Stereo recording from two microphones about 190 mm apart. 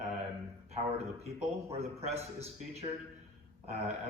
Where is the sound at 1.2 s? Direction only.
35° right (ahead or behind).